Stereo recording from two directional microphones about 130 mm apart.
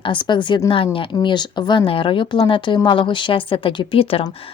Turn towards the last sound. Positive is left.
turn(degrees=45)  # may be behind; listen again after turning